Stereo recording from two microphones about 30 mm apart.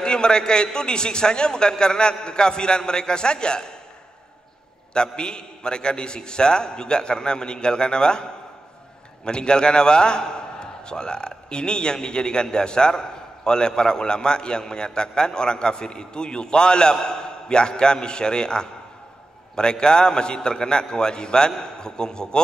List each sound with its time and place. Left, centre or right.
0.0 s a man's voice: left
4.9 s a man's voice: left